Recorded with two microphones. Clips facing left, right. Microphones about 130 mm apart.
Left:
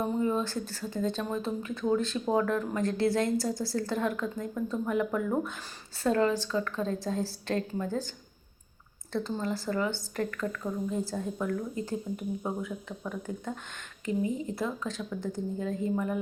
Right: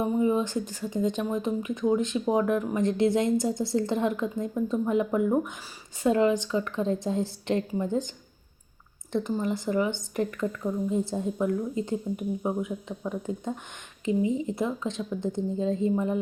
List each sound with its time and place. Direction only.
0.0 s speech: 15° right (ahead or behind)
9.1 s speech: 15° right (ahead or behind)